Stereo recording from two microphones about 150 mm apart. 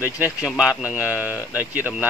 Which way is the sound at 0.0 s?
10° right (ahead or behind).